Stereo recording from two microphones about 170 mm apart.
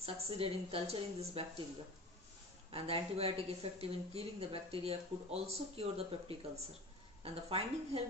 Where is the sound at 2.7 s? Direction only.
35° right (ahead or behind).